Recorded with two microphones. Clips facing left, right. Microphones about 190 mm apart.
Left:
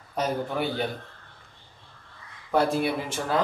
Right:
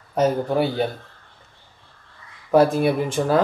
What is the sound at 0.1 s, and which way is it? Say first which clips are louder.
Speech: right 8 dB; 40° right (ahead or behind).